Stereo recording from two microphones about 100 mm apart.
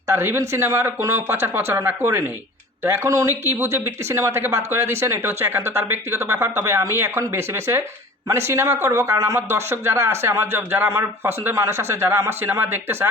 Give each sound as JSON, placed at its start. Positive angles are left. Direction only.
{"t": 0.1, "sound": "speech", "side_deg": -25}